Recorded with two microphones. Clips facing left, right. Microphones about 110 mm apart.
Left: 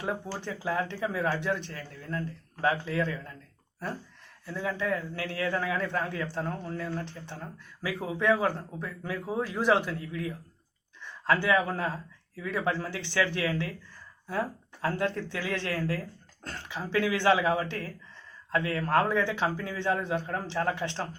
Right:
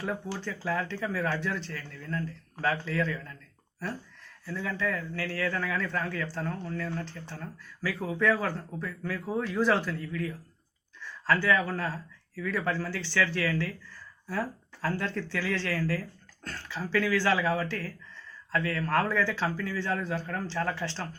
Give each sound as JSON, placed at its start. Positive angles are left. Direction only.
{"t": 0.0, "sound": "a man's voice", "side_deg": 20}
{"t": 4.4, "sound": "a man's voice", "side_deg": 20}
{"t": 14.8, "sound": "a man's voice", "side_deg": 20}